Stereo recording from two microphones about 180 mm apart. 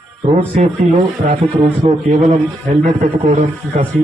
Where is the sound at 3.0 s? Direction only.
40° right (ahead or behind).